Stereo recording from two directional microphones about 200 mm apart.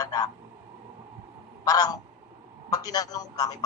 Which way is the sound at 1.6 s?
15° left (ahead or behind).